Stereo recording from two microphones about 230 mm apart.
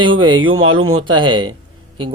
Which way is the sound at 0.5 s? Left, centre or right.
Right.